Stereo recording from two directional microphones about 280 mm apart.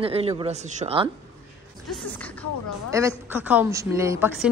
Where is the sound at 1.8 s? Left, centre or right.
Centre.